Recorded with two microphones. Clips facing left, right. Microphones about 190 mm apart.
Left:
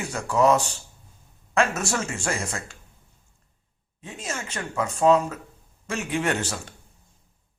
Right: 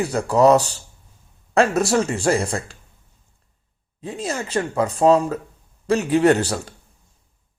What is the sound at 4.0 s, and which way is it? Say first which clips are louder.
Speech: right 7 dB; 35° right (ahead or behind).